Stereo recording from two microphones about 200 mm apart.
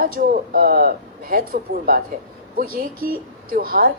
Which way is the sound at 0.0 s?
45° right (ahead or behind).